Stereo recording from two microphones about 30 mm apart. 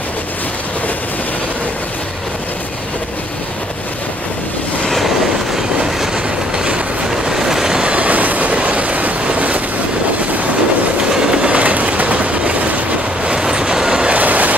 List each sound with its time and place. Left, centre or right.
6.1 s train: right
7.1 s train: centre
7.8 s train: right
11.1 s train: right
11.4 s train: right
11.7 s train: right
13.2 s train: right
14.1 s vehicle: right